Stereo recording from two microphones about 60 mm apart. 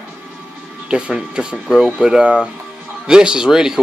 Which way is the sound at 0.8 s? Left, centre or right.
Centre.